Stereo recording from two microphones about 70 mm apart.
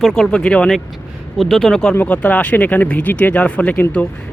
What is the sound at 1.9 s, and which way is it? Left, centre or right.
Speech, left.